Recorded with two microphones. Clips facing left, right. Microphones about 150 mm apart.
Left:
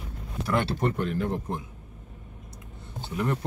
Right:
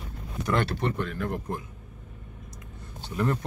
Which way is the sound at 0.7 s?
45° left (ahead or behind).